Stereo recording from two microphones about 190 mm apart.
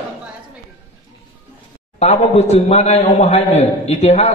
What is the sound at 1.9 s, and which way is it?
A man's voice, 35° left (ahead or behind).